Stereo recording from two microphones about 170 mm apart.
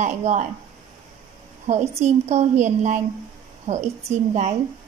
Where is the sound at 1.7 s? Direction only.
40° right (ahead or behind).